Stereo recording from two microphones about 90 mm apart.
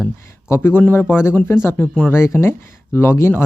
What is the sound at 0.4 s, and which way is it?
Speech, 25° left (ahead or behind).